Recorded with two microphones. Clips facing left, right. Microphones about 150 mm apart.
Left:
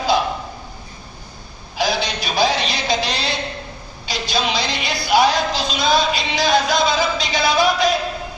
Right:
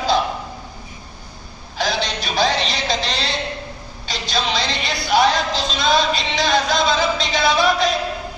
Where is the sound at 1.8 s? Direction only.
5° left (ahead or behind).